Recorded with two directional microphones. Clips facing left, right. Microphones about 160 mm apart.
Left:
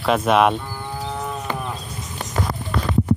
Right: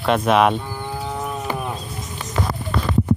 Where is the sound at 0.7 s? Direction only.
5° right (ahead or behind).